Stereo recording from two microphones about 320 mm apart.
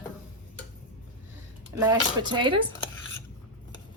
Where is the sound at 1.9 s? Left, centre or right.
Centre.